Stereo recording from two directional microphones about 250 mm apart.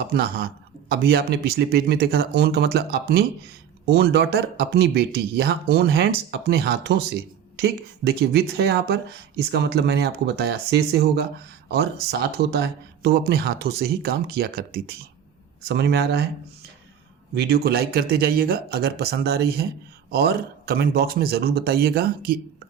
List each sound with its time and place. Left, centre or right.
0.1 s speech: right
17.3 s speech: right